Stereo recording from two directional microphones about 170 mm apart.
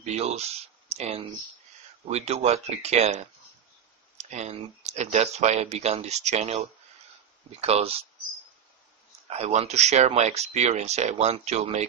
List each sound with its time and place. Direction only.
0.0 s speech: 40° right (ahead or behind)
9.3 s speech: 40° right (ahead or behind)